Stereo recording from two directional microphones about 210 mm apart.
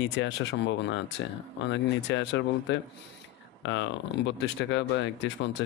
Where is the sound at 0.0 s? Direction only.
60° left (ahead or behind).